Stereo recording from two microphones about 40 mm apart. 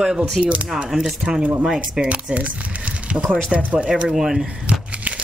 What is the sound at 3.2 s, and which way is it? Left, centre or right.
Speech, right.